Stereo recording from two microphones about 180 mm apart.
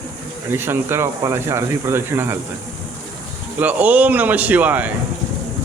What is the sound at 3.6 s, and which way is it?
Speech, 10° right (ahead or behind).